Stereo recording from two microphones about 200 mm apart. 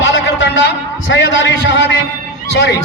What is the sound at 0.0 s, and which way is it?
A man's voice, 65° left (ahead or behind).